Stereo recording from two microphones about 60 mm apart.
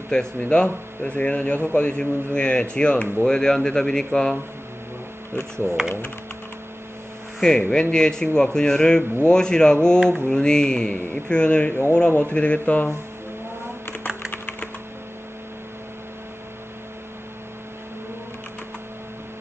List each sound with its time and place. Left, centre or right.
0.1 s a man's voice: centre
7.3 s a man's voice: centre
14.0 s typing: left